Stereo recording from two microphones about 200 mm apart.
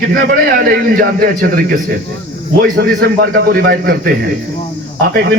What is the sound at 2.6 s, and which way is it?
Speech, 50° right (ahead or behind).